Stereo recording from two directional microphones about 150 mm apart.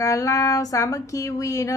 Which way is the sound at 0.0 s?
20° left (ahead or behind).